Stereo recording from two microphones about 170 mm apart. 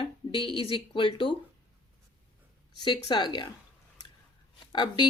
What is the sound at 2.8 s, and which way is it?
Speech, 25° left (ahead or behind).